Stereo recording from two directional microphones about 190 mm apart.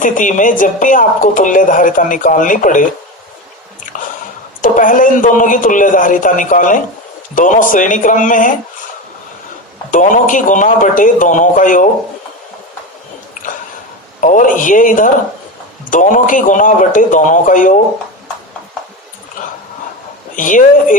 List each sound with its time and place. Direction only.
0.0 s a woman's voice: 40° left (ahead or behind)
4.6 s a woman's voice: 45° left (ahead or behind)
9.9 s a woman's voice: 45° left (ahead or behind)
14.2 s a woman's voice: 45° left (ahead or behind)
20.3 s a woman's voice: 45° left (ahead or behind)